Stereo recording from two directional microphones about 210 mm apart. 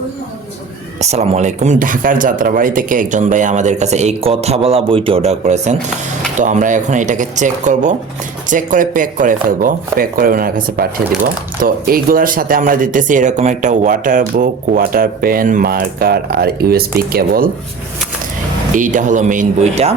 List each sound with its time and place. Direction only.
0.9 s speech: 30° right (ahead or behind)
18.7 s speech: 40° right (ahead or behind)